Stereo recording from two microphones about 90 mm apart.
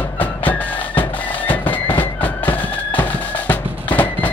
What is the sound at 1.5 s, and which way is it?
Music, 20° left (ahead or behind).